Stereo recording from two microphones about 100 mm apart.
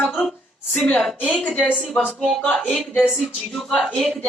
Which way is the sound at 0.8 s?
10° left (ahead or behind).